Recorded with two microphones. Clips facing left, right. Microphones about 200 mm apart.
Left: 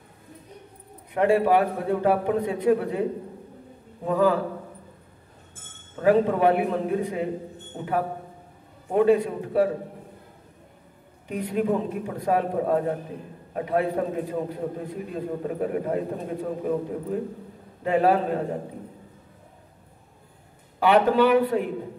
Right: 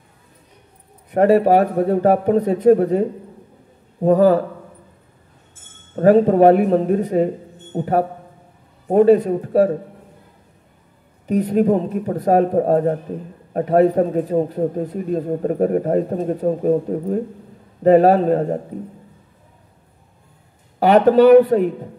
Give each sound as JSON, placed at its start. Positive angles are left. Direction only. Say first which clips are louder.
{"t": 1.1, "sound": "a man's voice", "louder": "right 7 dB", "side_deg": -40}
{"t": 5.9, "sound": "a man's voice", "louder": "right 8 dB", "side_deg": -40}
{"t": 11.2, "sound": "a man's voice", "louder": "right 9 dB", "side_deg": -40}
{"t": 20.8, "sound": "a man's voice", "louder": "right 7 dB", "side_deg": -40}